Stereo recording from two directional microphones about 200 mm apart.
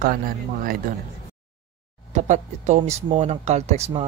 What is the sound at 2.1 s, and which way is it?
Speech, 35° right (ahead or behind).